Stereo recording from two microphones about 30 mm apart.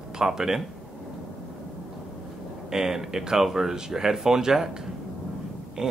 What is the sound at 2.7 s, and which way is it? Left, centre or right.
Speech, centre.